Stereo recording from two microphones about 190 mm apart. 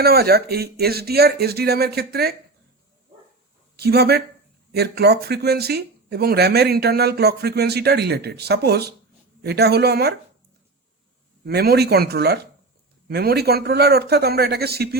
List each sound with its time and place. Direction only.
0.0 s speech: 55° right (ahead or behind)
3.8 s speech: 55° right (ahead or behind)
11.4 s speech: 55° right (ahead or behind)